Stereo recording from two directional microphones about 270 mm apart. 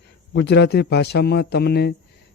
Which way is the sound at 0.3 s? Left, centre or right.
Left.